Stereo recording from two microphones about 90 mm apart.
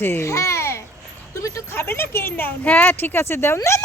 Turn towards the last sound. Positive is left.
turn(degrees=30)  # may be behind; listen again after turning